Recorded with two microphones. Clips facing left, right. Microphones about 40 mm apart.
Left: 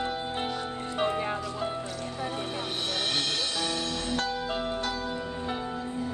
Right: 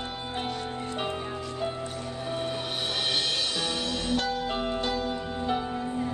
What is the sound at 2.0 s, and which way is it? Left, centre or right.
Music, centre.